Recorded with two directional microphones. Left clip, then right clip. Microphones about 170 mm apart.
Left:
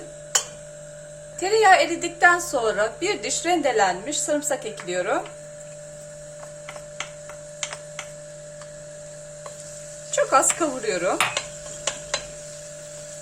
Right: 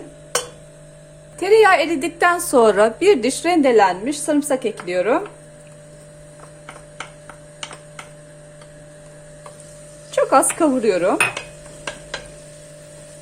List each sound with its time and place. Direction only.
1.4 s a woman's voice: 45° right (ahead or behind)
10.2 s dishes: 35° right (ahead or behind)